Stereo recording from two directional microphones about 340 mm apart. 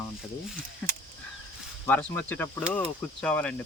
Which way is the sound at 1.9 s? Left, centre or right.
Centre.